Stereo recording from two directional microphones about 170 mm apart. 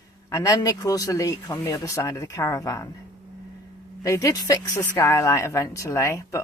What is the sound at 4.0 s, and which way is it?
Speech, 20° left (ahead or behind).